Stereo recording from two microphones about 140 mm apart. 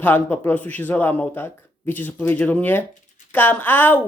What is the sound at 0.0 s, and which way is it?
Speech, 10° left (ahead or behind).